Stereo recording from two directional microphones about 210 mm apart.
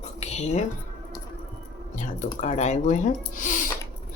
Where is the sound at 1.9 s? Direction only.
35° left (ahead or behind).